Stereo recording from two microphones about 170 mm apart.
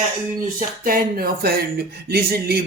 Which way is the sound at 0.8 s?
60° right (ahead or behind).